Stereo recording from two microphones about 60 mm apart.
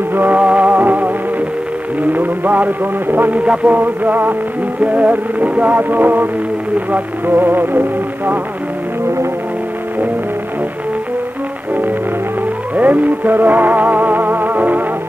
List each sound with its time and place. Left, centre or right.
0.1 s music: right
2.1 s speech: right
3.4 s a sound: right
6.9 s music: right
12.7 s music: right